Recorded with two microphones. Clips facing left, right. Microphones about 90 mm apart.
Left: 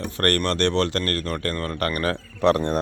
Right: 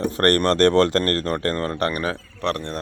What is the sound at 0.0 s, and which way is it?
Speech, 35° right (ahead or behind).